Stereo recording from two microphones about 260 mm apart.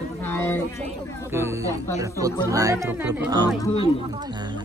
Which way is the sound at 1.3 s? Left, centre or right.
Centre.